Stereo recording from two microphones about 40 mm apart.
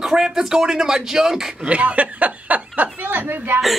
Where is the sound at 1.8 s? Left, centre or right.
Right.